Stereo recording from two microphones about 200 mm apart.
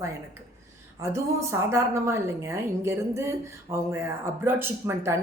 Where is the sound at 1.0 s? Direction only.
15° right (ahead or behind).